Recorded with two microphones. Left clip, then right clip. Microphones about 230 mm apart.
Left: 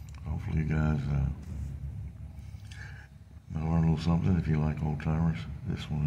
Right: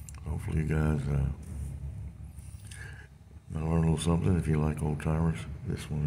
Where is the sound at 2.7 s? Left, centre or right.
Centre.